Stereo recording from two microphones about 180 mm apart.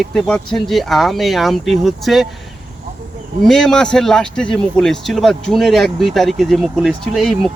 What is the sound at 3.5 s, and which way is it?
Speech, 5° left (ahead or behind).